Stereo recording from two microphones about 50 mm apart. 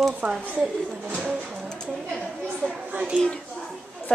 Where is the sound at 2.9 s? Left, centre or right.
Right.